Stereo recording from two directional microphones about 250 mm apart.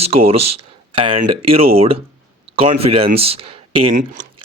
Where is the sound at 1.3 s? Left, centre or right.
Right.